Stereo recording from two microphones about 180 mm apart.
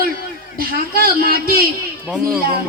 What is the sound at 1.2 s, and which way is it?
Speech, 55° right (ahead or behind).